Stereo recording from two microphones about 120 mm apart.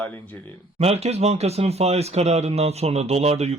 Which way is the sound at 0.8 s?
60° right (ahead or behind).